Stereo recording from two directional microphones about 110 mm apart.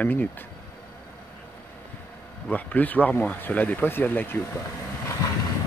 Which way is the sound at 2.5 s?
15° left (ahead or behind).